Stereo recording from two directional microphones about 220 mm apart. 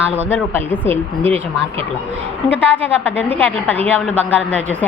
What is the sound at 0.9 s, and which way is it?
Speech, 25° right (ahead or behind).